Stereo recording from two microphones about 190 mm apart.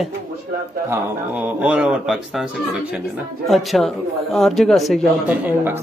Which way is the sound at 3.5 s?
Centre (ahead or behind).